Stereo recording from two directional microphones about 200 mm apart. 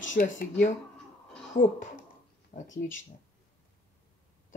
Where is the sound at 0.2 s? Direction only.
40° left (ahead or behind).